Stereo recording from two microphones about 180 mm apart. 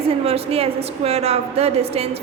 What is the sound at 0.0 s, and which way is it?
A woman's voice, 35° right (ahead or behind).